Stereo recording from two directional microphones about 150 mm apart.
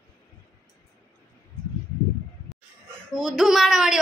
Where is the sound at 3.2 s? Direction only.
Centre (ahead or behind).